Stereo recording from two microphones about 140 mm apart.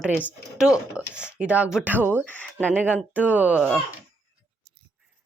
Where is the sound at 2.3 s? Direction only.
10° left (ahead or behind).